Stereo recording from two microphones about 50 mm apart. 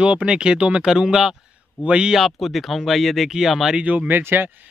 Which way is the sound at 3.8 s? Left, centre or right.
Right.